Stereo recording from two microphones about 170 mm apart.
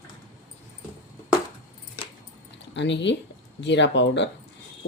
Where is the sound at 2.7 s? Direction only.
90° left.